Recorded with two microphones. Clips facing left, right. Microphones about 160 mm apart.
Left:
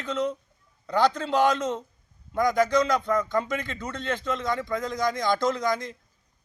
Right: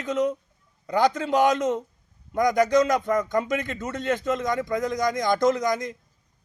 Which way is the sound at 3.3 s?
50° right (ahead or behind).